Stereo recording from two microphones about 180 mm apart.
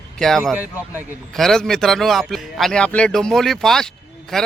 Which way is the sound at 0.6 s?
10° right (ahead or behind).